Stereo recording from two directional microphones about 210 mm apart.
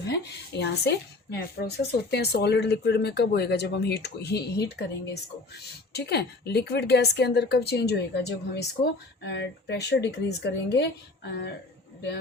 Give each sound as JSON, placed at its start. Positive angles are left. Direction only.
{"t": 0.1, "sound": "a woman's voice", "side_deg": 55}